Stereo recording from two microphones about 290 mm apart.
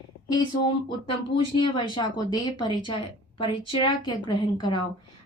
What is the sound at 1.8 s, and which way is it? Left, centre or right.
A woman's voice, centre.